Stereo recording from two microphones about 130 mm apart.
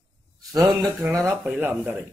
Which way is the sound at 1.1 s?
15° right (ahead or behind).